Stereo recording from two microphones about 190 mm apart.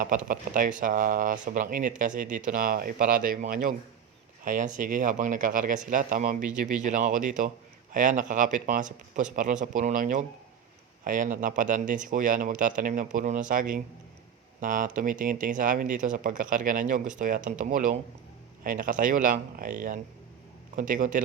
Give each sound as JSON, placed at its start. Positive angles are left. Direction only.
{"t": 0.3, "sound": "speech", "side_deg": -45}